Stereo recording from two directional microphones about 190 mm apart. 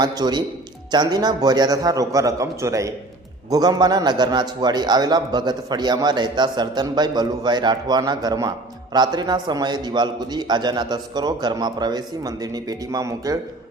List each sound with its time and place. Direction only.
0.0 s a man's voice: 20° right (ahead or behind)